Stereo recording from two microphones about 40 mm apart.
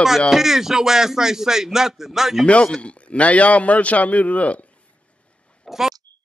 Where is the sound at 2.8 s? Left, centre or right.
Left.